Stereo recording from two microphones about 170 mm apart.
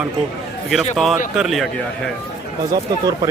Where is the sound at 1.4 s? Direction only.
Centre (ahead or behind).